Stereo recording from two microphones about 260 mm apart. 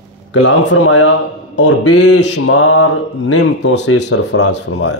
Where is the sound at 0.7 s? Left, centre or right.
Left.